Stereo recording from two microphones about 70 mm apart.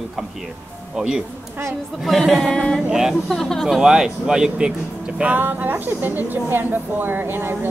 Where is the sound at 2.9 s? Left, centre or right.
Centre.